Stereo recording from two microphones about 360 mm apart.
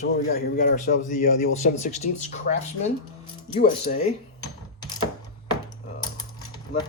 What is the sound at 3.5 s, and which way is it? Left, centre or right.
Mechanisms, left.